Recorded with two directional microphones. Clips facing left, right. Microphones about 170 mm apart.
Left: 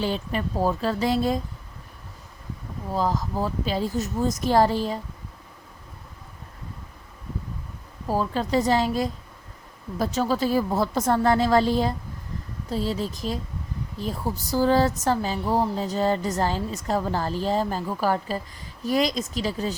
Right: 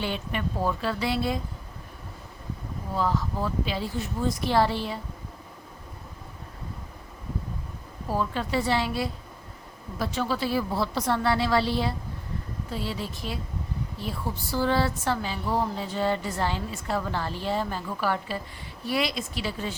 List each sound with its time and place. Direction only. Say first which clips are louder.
0.0 s speech: left 4 dB; 35° left (ahead or behind)
2.9 s speech: left 2 dB; 40° left (ahead or behind)
8.0 s a woman's voice: left 3 dB; 40° left (ahead or behind)